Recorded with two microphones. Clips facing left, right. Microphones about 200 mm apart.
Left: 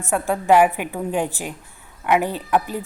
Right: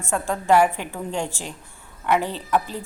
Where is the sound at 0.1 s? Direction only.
15° left (ahead or behind).